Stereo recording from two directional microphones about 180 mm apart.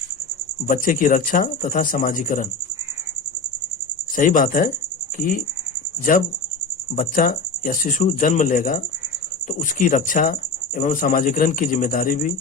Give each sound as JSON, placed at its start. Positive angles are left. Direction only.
{"t": 0.7, "sound": "speech", "side_deg": 50}
{"t": 4.1, "sound": "speech", "side_deg": 50}
{"t": 6.9, "sound": "speech", "side_deg": 45}